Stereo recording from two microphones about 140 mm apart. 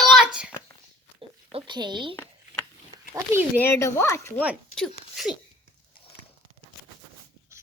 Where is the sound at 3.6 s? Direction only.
15° left (ahead or behind).